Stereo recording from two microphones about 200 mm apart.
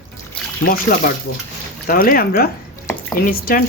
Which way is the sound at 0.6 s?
45° left (ahead or behind).